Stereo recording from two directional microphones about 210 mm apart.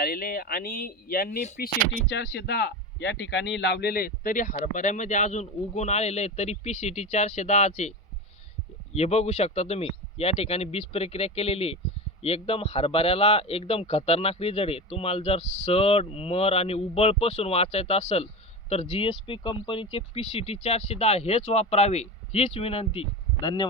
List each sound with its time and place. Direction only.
0.0 s a man's voice: 45° left (ahead or behind); by 23.6 s 20° left (ahead or behind)